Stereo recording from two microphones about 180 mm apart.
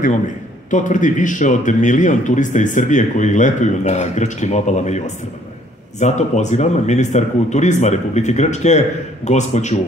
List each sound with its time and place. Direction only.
0.7 s a man's voice: 45° left (ahead or behind)